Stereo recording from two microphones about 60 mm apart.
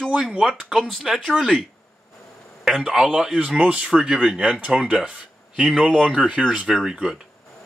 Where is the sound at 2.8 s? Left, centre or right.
Centre.